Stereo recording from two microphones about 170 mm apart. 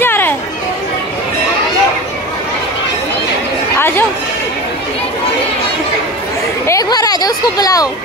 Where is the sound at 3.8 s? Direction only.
15° left (ahead or behind).